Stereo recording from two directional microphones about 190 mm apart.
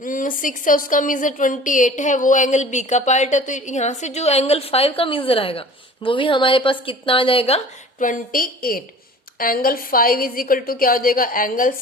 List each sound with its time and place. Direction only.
0.0 s a woman's voice: 45° left (ahead or behind)